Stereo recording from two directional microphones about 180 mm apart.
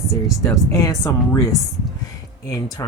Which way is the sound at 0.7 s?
15° left (ahead or behind).